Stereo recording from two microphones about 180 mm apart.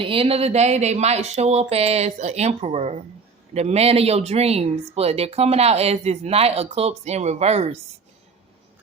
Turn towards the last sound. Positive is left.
turn(degrees=-35)  # may be behind; listen again after turning